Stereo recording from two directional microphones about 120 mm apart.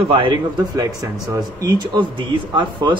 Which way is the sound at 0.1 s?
45° right (ahead or behind).